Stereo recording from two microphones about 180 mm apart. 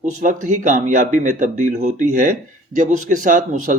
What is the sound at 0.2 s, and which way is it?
Speech, 45° right (ahead or behind).